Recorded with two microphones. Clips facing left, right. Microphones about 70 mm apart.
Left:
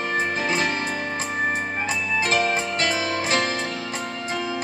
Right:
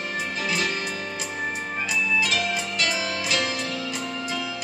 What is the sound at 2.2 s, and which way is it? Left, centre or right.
Music, left.